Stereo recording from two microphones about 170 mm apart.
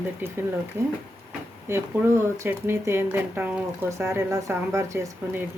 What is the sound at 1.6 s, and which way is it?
Speech, 15° right (ahead or behind).